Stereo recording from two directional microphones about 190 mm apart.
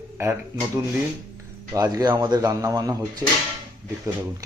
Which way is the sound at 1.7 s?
20° right (ahead or behind).